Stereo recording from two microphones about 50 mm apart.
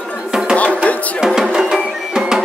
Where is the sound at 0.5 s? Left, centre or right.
Left.